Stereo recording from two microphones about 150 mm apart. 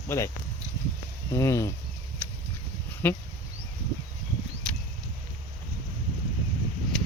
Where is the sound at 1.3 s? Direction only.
20° left (ahead or behind).